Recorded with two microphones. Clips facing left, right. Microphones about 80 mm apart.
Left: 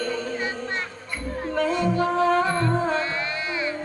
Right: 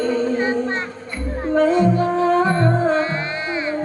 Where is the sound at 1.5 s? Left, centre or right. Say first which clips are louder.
Right 7 dB; right.